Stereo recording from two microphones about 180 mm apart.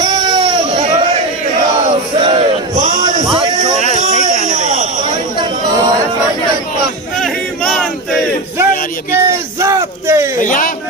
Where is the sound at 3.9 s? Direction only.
40° right (ahead or behind).